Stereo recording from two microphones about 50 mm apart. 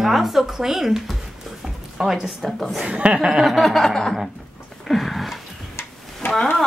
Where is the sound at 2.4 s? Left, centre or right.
Centre.